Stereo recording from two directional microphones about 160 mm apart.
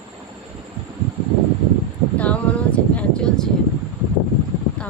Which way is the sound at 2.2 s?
10° left (ahead or behind).